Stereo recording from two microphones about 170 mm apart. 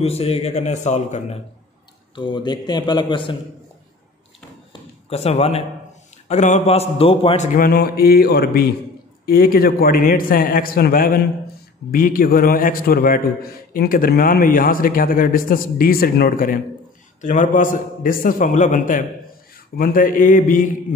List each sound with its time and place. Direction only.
0.0 s speech: 35° left (ahead or behind)
2.1 s a man's voice: 25° left (ahead or behind)
5.1 s speech: 40° left (ahead or behind)
7.5 s a man's voice: 60° left (ahead or behind)
9.2 s a man's voice: 60° left (ahead or behind)